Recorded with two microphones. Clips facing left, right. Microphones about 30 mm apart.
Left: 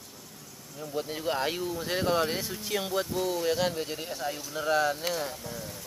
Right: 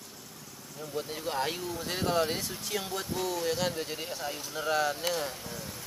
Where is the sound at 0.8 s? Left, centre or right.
Centre.